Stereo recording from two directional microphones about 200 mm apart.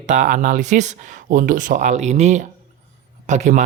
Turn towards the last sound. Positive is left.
turn(degrees=-35)  # may be behind; listen again after turning